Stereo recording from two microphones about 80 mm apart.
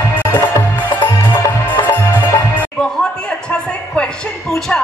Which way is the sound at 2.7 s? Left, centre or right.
Centre.